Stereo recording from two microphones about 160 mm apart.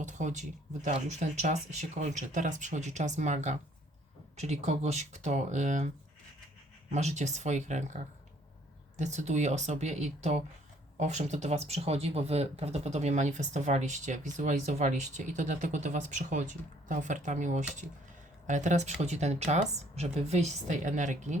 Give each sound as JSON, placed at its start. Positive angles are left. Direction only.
{"t": 0.0, "sound": "speech", "side_deg": -50}
{"t": 6.9, "sound": "speech", "side_deg": -45}
{"t": 9.0, "sound": "speech", "side_deg": -45}